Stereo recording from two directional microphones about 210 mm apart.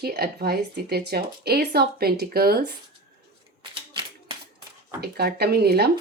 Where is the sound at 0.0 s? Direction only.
50° right (ahead or behind).